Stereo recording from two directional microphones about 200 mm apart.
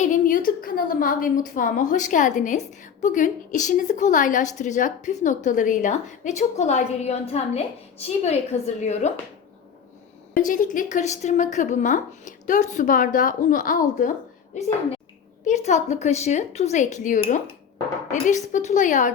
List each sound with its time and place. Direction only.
0.0 s a woman's voice: 40° left (ahead or behind)
10.3 s a woman's voice: 40° left (ahead or behind)
15.4 s a woman's voice: 35° left (ahead or behind)